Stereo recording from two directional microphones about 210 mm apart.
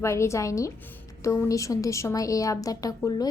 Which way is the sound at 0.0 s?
15° left (ahead or behind).